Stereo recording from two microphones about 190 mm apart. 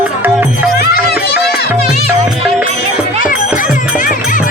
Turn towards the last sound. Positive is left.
turn(degrees=45)  # may be behind; listen again after turning